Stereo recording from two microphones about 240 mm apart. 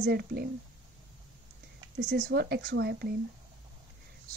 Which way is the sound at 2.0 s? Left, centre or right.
Right.